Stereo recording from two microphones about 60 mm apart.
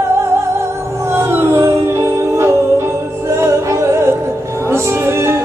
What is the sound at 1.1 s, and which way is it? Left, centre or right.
Music, right.